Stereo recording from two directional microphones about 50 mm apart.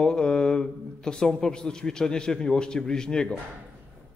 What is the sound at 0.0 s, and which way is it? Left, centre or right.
Speech, centre.